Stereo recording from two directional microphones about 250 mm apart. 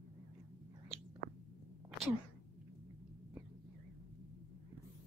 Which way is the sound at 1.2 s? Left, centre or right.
Right.